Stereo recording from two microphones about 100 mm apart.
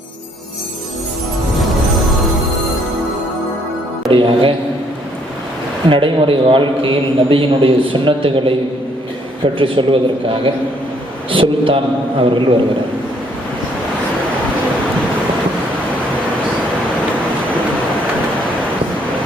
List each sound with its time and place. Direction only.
4.1 s speech: 60° right (ahead or behind)
5.9 s a man's voice: 60° right (ahead or behind)